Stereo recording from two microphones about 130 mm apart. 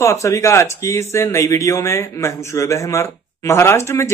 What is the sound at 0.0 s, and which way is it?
Speech, 25° left (ahead or behind).